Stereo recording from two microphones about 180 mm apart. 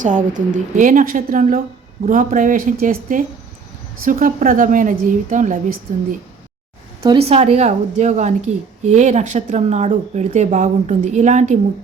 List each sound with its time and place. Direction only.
0.0 s a woman's voice: 45° right (ahead or behind)
7.3 s a woman's voice: 35° right (ahead or behind)